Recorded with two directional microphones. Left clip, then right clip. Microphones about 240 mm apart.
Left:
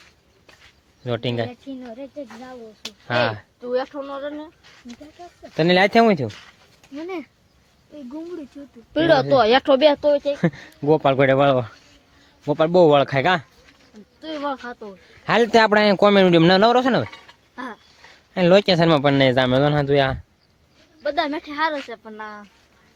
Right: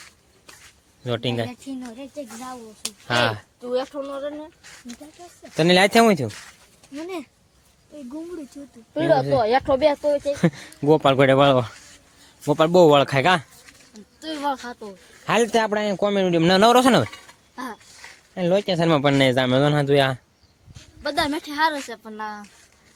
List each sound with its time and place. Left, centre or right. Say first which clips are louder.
1.0 s speech: left 1 dB; centre
2.8 s speech: even; centre
3.6 s speech: left 2 dB; centre
5.4 s speech: even; centre
8.9 s speech: left 3 dB; left
10.3 s speech: even; centre
16.5 s speech: even; centre
17.1 s a sound: even; centre
18.3 s speech: left 6 dB; centre
21.0 s speech: left 1 dB; right
21.2 s speech: right 1 dB; centre